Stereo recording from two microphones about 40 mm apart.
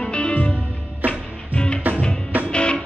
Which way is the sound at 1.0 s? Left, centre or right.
Right.